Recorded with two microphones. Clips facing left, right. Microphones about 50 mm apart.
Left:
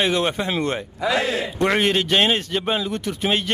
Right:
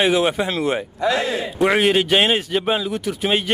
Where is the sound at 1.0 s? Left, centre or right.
Centre.